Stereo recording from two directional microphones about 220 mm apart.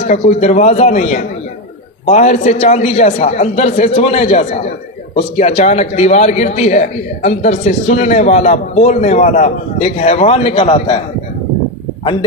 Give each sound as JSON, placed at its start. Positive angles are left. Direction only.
{"t": 0.0, "sound": "a man's voice", "side_deg": 30}
{"t": 12.0, "sound": "speech", "side_deg": 25}